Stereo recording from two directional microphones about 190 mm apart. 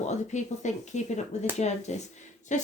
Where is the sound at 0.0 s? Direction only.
40° left (ahead or behind).